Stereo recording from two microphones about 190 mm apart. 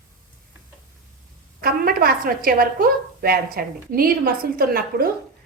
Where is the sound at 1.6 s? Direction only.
50° right (ahead or behind).